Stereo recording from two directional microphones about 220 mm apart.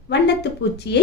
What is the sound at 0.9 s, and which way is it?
Speech, 50° left (ahead or behind).